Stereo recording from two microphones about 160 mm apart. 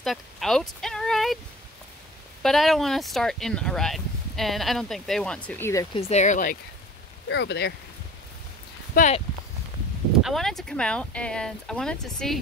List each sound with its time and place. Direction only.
0.0 s a sound: centre (ahead or behind)
2.4 s speech: centre (ahead or behind)
5.9 s speech: 45° left (ahead or behind)
7.3 s speech: 90° left
9.0 s speech: 60° left (ahead or behind)
10.2 s speech: centre (ahead or behind)